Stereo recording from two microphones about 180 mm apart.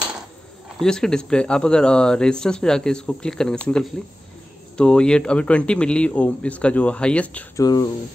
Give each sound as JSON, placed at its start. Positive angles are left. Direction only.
{"t": 0.7, "sound": "speech", "side_deg": 5}
{"t": 7.5, "sound": "speech", "side_deg": 20}